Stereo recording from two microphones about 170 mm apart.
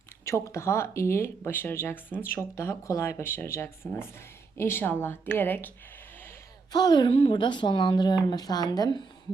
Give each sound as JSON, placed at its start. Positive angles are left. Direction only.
{"t": 0.3, "sound": "speech", "side_deg": 15}
{"t": 6.7, "sound": "a woman's voice", "side_deg": 25}